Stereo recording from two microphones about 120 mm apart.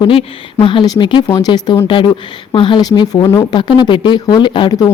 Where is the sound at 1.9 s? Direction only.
45° left (ahead or behind).